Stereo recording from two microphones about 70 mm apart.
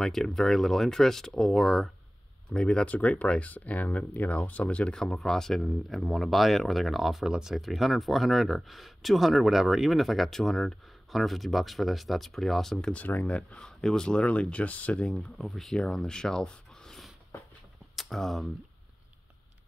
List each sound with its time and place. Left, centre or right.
0.0 s speech: centre
2.5 s speech: centre
5.0 s speech: centre
12.7 s speech: centre
15.0 s speech: centre